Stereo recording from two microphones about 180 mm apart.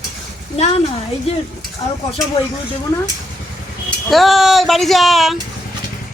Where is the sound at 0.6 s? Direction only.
35° left (ahead or behind).